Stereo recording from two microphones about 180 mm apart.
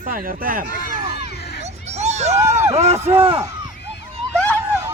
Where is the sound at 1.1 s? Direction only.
65° left (ahead or behind).